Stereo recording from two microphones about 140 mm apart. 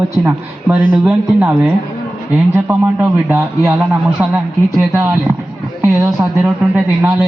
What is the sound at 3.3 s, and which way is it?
A man's voice, 15° right (ahead or behind).